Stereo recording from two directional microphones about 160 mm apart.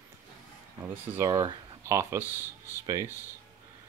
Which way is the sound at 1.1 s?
20° right (ahead or behind).